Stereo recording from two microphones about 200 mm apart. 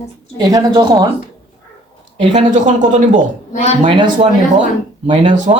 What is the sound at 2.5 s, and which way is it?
A man's voice, 35° right (ahead or behind).